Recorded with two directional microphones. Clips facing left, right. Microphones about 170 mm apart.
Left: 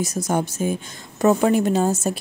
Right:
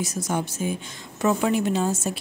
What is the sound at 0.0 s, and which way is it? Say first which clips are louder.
Speech: left 4 dB; 40° left (ahead or behind).